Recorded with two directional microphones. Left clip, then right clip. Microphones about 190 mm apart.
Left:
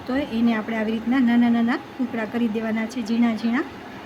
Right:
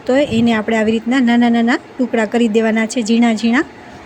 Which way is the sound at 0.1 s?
30° right (ahead or behind).